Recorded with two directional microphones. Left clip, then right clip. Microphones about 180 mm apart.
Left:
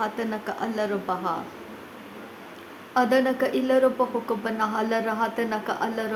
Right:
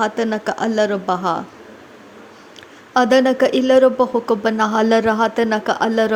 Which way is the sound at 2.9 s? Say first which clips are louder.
Right 8 dB; 40° right (ahead or behind).